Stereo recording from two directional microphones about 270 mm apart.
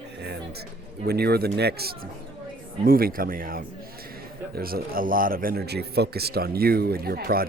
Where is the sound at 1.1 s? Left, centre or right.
Right.